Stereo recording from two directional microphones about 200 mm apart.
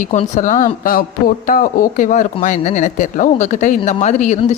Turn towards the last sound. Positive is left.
turn(degrees=35)  # may be behind; listen again after turning